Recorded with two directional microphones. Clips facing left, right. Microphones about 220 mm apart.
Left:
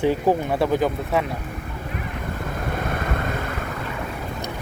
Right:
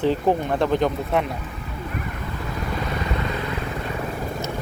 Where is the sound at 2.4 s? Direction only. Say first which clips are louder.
Even; 50° left (ahead or behind).